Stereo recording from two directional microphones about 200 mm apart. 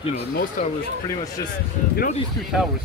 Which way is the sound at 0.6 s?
40° left (ahead or behind).